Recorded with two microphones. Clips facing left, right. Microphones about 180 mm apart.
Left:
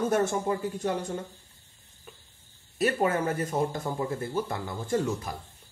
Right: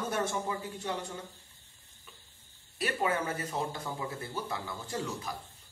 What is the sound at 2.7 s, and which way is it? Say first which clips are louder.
Speech: left 6 dB; 45° left (ahead or behind).